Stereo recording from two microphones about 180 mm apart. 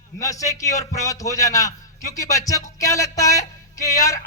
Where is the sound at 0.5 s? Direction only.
20° left (ahead or behind).